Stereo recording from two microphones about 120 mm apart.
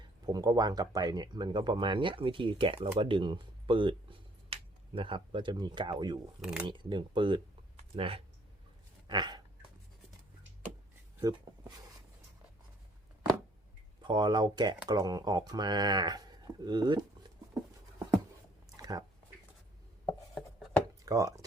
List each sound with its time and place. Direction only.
0.3 s speech: 35° right (ahead or behind)
6.4 s speech: 5° right (ahead or behind)
6.7 s speech: 40° right (ahead or behind)
7.9 s speech: 50° right (ahead or behind)
9.0 s dog: 40° right (ahead or behind)
14.0 s speech: 40° right (ahead or behind)
18.8 s a sound: 30° right (ahead or behind)
20.1 s chopping: 5° left (ahead or behind)
21.0 s speech: 30° right (ahead or behind)